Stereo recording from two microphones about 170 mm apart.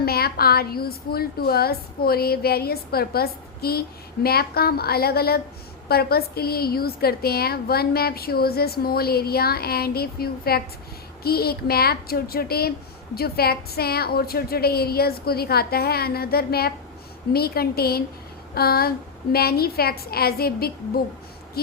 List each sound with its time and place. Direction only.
0.0 s a woman's voice: 65° left (ahead or behind)